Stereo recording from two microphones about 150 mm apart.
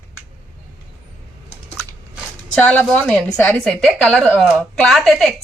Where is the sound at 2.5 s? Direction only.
10° left (ahead or behind).